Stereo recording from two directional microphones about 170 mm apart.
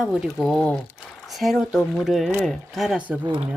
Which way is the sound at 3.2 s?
30° right (ahead or behind).